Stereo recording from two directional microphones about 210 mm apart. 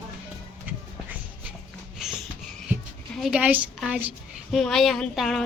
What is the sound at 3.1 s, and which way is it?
A woman's voice, 5° right (ahead or behind).